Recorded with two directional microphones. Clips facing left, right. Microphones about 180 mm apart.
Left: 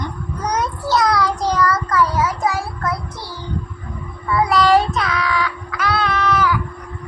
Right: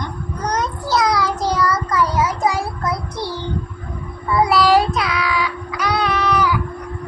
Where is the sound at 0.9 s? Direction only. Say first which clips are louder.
Left 1 dB; centre (ahead or behind).